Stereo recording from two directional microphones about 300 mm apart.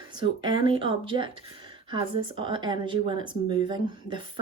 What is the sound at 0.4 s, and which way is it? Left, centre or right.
Speech, centre.